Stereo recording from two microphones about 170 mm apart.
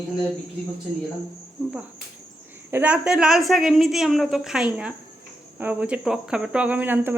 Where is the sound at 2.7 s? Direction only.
5° right (ahead or behind).